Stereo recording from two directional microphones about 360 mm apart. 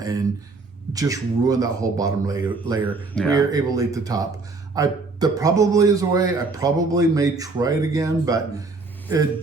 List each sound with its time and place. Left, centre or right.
0.0 s a sound: centre
0.9 s a man's voice: centre
2.9 s speech: centre
3.3 s a man's voice: centre